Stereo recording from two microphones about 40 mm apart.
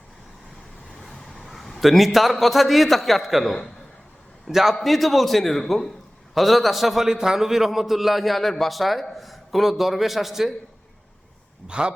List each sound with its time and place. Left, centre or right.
1.2 s vehicle: centre
1.5 s a man's voice: centre
11.7 s speech: right